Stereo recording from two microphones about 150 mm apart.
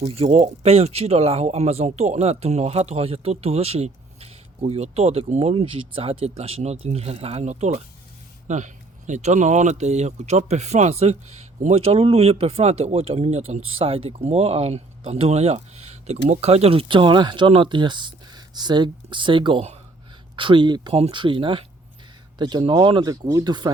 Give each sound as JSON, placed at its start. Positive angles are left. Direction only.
{"t": 0.0, "sound": "speech", "side_deg": -40}